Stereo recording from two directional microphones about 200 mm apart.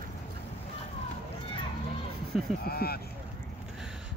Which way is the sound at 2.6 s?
50° left (ahead or behind).